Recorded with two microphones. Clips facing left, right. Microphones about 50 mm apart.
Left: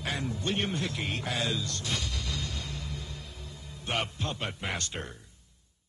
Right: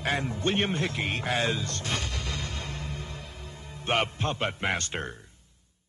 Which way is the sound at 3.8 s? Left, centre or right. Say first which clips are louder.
Right 5 dB; right.